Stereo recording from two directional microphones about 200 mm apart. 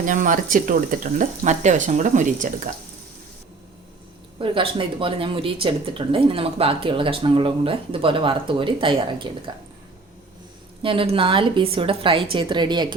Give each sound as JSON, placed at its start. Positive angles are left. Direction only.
{"t": 0.0, "sound": "speech", "side_deg": -40}
{"t": 4.4, "sound": "speech", "side_deg": -25}
{"t": 10.8, "sound": "speech", "side_deg": -25}